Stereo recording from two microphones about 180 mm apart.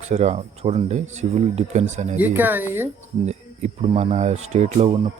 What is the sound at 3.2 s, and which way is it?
Speech, 40° right (ahead or behind).